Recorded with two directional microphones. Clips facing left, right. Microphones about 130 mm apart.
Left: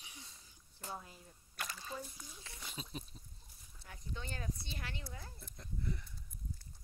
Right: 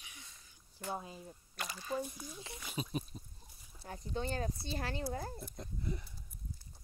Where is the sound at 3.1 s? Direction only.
15° right (ahead or behind).